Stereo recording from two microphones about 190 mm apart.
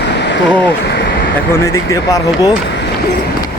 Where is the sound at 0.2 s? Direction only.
65° left (ahead or behind).